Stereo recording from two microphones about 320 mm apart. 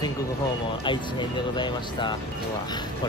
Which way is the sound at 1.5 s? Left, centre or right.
Centre.